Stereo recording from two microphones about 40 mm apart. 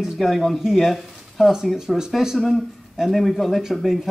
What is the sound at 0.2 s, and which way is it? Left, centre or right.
Speech, centre.